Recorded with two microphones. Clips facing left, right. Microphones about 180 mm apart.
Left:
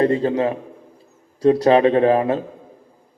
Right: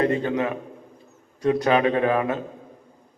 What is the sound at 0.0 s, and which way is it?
A man's voice, 30° left (ahead or behind).